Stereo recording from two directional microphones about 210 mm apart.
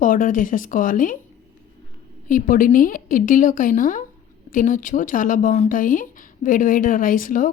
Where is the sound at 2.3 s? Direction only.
40° left (ahead or behind).